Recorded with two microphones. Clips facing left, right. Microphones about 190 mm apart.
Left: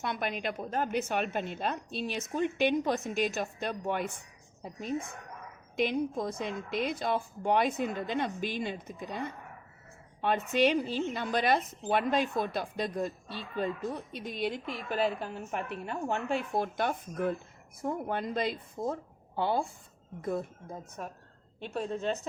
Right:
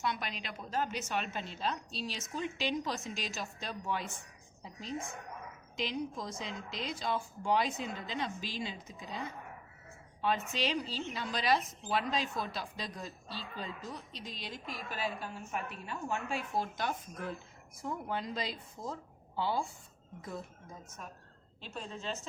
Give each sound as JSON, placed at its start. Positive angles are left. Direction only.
{"t": 0.0, "sound": "a woman's voice", "side_deg": 55}